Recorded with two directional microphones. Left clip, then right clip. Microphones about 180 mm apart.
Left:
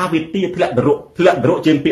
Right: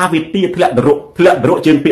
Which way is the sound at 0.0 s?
10° right (ahead or behind).